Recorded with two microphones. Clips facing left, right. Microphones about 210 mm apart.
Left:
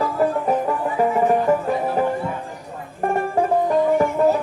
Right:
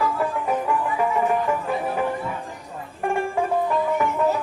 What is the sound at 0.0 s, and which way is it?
Music, 40° left (ahead or behind).